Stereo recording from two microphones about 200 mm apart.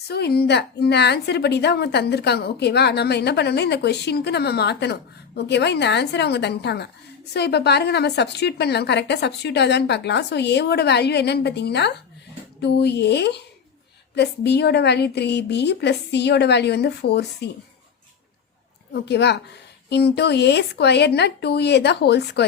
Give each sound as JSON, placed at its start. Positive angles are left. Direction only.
{"t": 0.1, "sound": "a woman's voice", "side_deg": 55}
{"t": 19.0, "sound": "a woman's voice", "side_deg": 55}